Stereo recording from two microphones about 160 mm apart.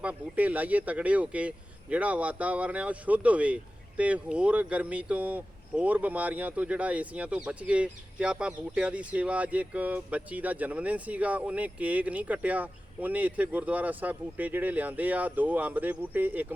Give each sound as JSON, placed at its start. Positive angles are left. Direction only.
{"t": 0.0, "sound": "speech", "side_deg": -10}